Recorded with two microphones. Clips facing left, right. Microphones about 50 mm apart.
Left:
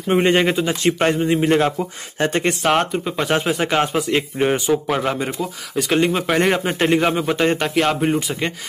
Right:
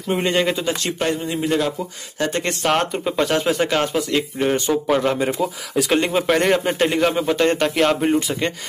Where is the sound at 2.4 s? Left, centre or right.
Centre.